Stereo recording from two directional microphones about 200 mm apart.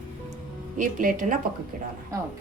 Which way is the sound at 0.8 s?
40° right (ahead or behind).